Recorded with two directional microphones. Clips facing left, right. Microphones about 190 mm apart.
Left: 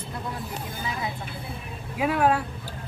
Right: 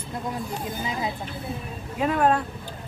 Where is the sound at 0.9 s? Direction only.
20° right (ahead or behind).